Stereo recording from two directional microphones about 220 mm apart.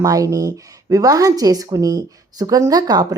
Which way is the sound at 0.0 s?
15° right (ahead or behind).